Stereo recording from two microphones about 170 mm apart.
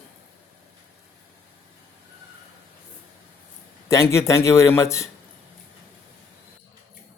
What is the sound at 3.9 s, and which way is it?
A man's voice, 15° left (ahead or behind).